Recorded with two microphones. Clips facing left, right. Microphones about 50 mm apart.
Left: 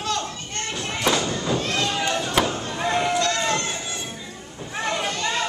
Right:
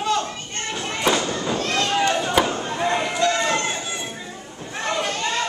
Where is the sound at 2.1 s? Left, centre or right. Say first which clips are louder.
Right 2 dB; centre.